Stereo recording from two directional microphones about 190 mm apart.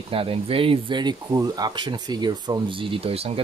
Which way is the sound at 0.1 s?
30° right (ahead or behind).